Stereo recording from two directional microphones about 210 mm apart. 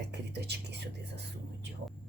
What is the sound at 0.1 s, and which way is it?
Speech, 50° right (ahead or behind).